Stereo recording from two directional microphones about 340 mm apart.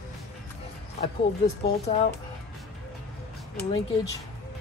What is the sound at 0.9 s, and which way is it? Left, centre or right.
Speech, centre.